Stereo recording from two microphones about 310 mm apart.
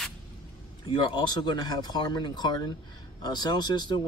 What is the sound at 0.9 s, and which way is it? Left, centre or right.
Speech, centre.